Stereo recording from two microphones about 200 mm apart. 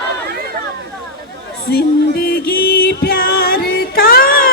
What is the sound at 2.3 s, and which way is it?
Music, 50° left (ahead or behind).